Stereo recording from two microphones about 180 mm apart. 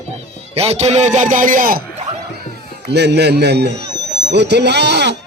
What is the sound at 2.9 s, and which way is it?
Speech, 70° right (ahead or behind).